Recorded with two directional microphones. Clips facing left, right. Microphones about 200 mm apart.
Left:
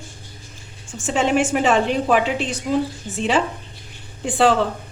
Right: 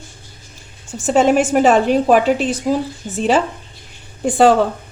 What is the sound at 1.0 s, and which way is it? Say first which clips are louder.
A woman's voice: right 5 dB; 45° right (ahead or behind).